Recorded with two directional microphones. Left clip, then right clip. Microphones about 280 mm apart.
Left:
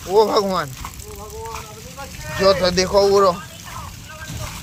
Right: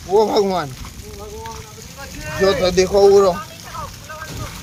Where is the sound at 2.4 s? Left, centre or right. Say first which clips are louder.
Even; centre.